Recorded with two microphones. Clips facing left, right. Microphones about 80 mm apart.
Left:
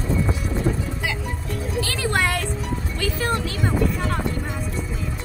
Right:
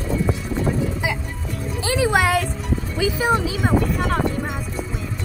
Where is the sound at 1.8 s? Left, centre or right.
Centre.